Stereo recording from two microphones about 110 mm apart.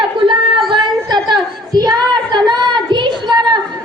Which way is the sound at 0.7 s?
40° right (ahead or behind).